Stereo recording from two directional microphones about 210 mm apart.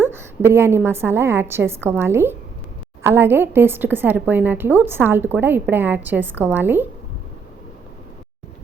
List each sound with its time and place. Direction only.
0.0 s a woman's voice: 10° right (ahead or behind)